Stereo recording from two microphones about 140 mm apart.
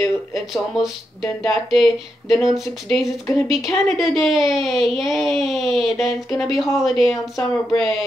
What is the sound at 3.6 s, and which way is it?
Speech, 25° left (ahead or behind).